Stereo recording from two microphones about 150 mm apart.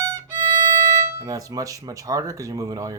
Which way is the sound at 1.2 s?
25° right (ahead or behind).